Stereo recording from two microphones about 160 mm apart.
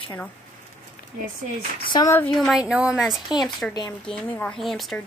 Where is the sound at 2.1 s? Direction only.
5° left (ahead or behind).